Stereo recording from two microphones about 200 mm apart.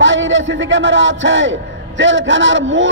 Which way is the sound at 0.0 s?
70° right (ahead or behind).